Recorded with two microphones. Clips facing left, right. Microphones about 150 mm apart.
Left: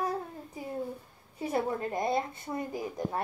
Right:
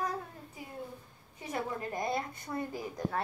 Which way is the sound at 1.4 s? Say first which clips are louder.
Left 6 dB; 30° left (ahead or behind).